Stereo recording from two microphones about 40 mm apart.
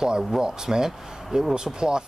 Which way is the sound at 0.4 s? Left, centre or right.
Centre.